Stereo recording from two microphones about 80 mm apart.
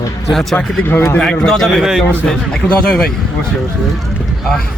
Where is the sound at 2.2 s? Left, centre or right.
Centre.